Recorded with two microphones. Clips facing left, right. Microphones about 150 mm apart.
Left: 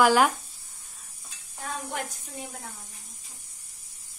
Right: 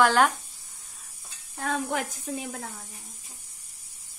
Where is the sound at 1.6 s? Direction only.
75° right (ahead or behind).